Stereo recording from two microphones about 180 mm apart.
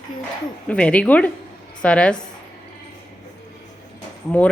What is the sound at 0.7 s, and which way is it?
A woman's voice, 5° left (ahead or behind).